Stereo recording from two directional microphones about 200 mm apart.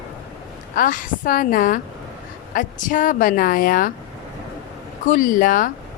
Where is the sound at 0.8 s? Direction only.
45° left (ahead or behind).